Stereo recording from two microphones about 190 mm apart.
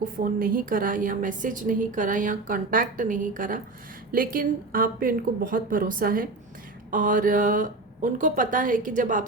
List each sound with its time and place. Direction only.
0.0 s a woman's voice: 45° right (ahead or behind)